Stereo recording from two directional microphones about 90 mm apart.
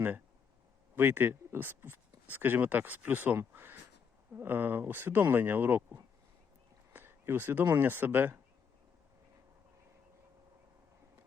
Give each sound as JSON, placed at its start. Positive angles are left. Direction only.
{"t": 0.9, "sound": "speech", "side_deg": -25}